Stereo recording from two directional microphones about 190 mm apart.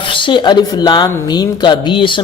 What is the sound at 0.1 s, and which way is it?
Speech, 25° left (ahead or behind).